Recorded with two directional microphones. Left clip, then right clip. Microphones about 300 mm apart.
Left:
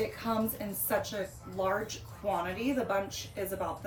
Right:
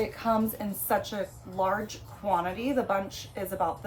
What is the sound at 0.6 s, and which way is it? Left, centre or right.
A woman's voice, centre.